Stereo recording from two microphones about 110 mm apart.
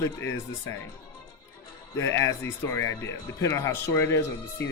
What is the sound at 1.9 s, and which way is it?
Speech, 25° left (ahead or behind).